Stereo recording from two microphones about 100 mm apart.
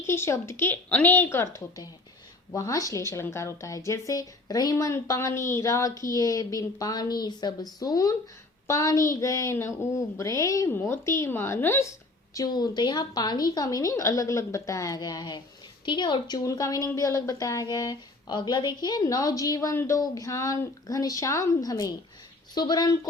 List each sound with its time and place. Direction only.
0.0 s speech: 25° left (ahead or behind)
2.6 s speech: 35° left (ahead or behind)
10.7 s speech: 20° left (ahead or behind)
12.3 s speech: 40° left (ahead or behind)